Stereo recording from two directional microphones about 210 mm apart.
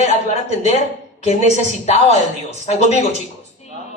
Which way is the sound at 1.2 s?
30° left (ahead or behind).